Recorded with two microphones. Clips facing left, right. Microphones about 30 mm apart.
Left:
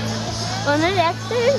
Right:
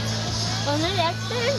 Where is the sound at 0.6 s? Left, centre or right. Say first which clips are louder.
Left 7 dB; centre.